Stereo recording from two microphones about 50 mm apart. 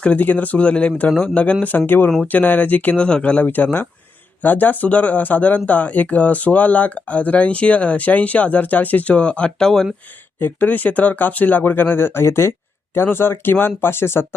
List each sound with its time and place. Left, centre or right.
0.2 s speech: left
3.0 s speech: left
3.4 s speech: left
9.6 s speech: centre
10.4 s speech: left